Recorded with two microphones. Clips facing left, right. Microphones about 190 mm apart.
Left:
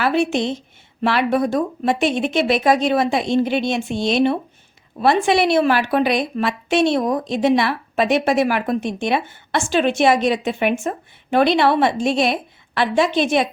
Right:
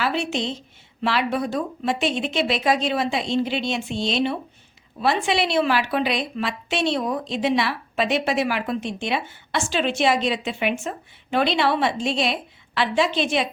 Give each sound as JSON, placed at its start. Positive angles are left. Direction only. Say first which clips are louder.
{"t": 0.0, "sound": "a woman's voice", "louder": "left 6 dB", "side_deg": 50}